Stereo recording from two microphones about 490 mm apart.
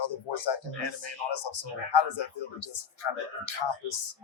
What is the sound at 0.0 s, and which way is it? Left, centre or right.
Speech, left.